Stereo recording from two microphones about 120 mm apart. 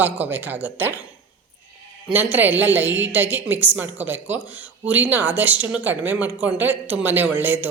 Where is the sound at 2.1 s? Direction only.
15° right (ahead or behind).